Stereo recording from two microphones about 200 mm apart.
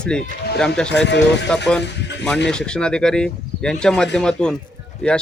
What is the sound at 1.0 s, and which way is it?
Speech, 60° left (ahead or behind).